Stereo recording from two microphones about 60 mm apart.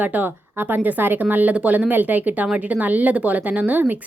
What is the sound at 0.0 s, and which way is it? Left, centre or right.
A woman's voice, right.